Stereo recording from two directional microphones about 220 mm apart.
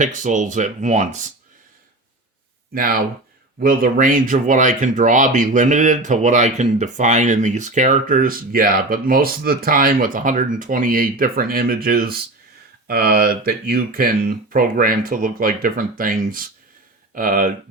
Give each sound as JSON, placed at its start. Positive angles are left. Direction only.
{"t": 0.0, "sound": "speech", "side_deg": -35}
{"t": 2.7, "sound": "speech", "side_deg": -40}